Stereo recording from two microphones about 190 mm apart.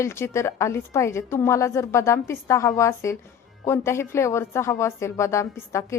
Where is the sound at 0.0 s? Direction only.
15° left (ahead or behind).